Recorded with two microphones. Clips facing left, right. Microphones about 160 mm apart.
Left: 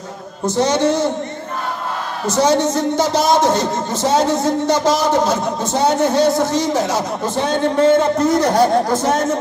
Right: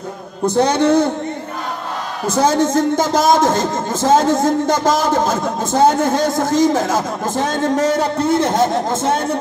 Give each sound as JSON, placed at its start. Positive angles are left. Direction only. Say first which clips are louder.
{"t": 0.6, "sound": "a man's voice", "louder": "right 2 dB", "side_deg": -55}
{"t": 2.4, "sound": "speech", "louder": "right 1 dB", "side_deg": -50}